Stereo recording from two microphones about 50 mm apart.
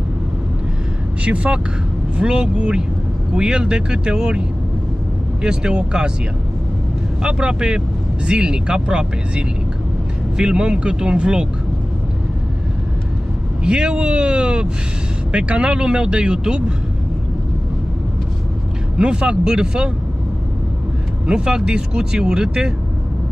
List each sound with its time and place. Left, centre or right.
1.2 s speech: right
7.2 s speech: centre
13.7 s speech: right
18.9 s speech: centre
21.3 s speech: centre